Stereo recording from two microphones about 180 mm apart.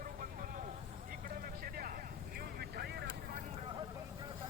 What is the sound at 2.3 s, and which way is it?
Vehicle, 60° right (ahead or behind).